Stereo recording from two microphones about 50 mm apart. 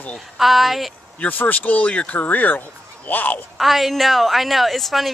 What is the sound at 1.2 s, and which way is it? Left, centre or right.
Speech, left.